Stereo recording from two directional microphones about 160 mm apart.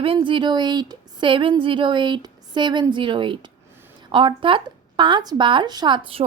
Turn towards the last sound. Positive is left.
turn(degrees=-35)  # may be behind; listen again after turning